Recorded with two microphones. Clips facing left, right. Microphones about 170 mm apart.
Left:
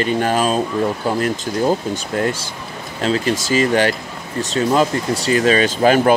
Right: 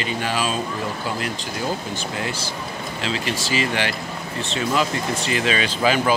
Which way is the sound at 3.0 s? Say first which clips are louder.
Left 8 dB; 45° left (ahead or behind).